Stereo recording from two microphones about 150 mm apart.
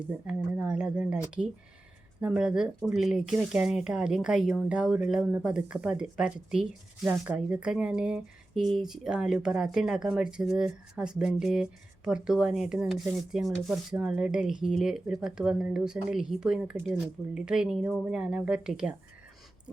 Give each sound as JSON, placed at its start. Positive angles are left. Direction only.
{"t": 0.3, "sound": "speech", "side_deg": -10}
{"t": 2.2, "sound": "speech", "side_deg": -5}